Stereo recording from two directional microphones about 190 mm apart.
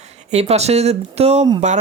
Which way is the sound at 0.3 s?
35° right (ahead or behind).